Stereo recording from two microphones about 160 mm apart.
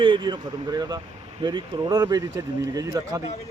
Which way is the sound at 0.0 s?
30° right (ahead or behind).